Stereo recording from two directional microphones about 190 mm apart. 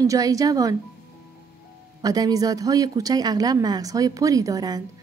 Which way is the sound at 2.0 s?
20° right (ahead or behind).